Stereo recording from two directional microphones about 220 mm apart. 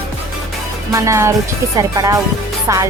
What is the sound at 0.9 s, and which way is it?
Speech, 15° right (ahead or behind).